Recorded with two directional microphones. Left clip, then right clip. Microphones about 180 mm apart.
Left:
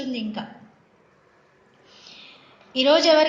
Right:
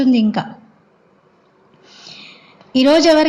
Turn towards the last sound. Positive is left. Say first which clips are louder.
# right 5 dB
turn(degrees=-50)  # may be behind; listen again after turning